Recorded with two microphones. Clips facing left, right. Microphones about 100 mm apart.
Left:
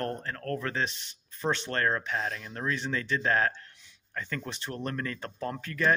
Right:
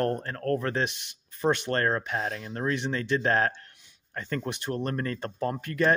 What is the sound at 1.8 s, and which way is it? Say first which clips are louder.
Speech: right 2 dB; 30° right (ahead or behind).